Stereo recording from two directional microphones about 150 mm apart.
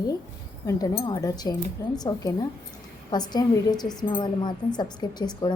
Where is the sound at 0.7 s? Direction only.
25° left (ahead or behind).